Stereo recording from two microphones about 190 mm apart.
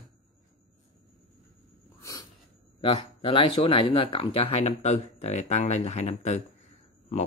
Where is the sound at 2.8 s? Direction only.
30° left (ahead or behind).